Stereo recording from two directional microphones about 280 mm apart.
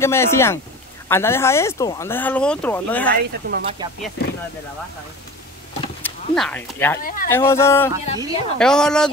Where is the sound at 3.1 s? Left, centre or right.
Right.